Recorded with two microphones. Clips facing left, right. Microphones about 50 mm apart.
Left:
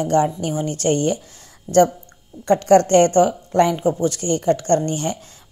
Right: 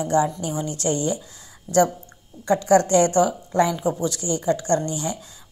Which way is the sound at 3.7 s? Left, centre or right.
Left.